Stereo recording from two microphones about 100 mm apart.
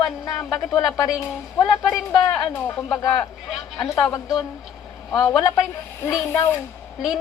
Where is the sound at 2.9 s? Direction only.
40° left (ahead or behind).